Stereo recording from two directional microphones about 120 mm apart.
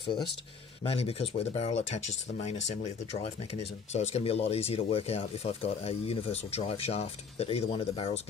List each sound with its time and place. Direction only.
0.8 s speech: 55° left (ahead or behind)